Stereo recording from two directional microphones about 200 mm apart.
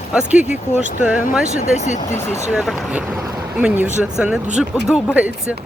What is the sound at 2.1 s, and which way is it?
Speech, 10° left (ahead or behind).